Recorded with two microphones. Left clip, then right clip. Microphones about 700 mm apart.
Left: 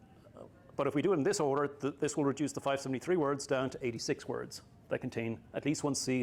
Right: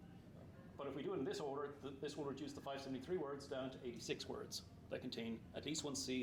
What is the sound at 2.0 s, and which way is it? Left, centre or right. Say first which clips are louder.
Speech: left 14 dB; left.